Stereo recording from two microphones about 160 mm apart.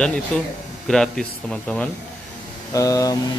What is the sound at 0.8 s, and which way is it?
Speech, 5° left (ahead or behind).